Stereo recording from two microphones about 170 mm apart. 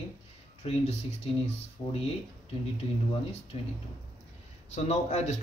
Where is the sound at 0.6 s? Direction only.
40° left (ahead or behind).